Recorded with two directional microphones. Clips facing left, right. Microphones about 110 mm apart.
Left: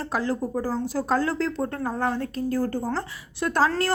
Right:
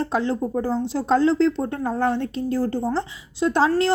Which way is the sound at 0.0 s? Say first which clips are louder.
Right 4 dB; 30° right (ahead or behind).